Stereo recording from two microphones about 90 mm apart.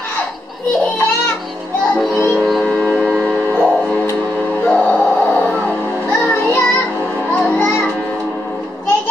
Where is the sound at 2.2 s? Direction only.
Centre (ahead or behind).